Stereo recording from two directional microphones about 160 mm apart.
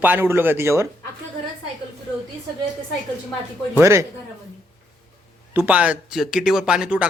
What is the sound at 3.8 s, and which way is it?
Speech, 15° right (ahead or behind).